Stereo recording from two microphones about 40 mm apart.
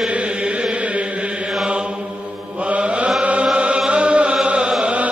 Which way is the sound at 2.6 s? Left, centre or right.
Right.